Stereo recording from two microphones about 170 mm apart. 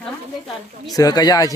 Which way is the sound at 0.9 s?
20° left (ahead or behind).